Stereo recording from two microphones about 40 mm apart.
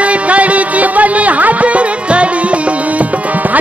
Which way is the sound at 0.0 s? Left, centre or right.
Right.